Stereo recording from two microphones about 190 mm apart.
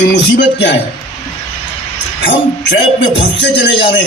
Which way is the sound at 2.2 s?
70° left (ahead or behind).